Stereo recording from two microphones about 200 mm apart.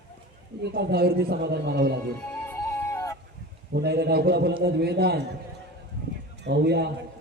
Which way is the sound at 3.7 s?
55° right (ahead or behind).